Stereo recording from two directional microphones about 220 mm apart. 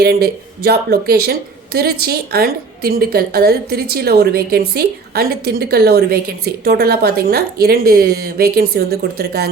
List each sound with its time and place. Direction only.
0.0 s a woman's voice: 45° right (ahead or behind)